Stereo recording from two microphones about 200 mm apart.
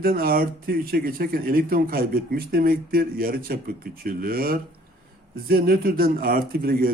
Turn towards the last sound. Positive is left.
turn(degrees=-45)  # may be behind; listen again after turning